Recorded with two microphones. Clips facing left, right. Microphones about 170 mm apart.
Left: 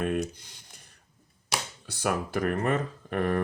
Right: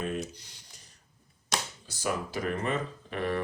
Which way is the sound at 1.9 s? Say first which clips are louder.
Left 4 dB; 60° left (ahead or behind).